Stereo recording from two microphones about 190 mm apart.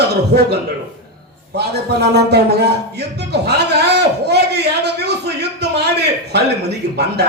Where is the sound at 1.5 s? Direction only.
60° right (ahead or behind).